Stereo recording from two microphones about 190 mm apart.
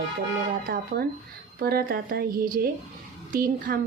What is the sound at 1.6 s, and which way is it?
Speech, 55° right (ahead or behind).